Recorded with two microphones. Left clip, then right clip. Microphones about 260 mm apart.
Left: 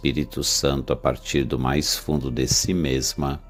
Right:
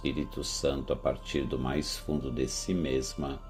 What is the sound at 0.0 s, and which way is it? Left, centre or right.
Speech, left.